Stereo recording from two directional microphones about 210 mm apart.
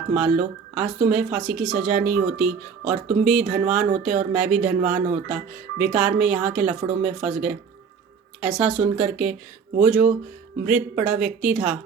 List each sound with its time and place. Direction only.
0.1 s a woman's voice: 5° right (ahead or behind)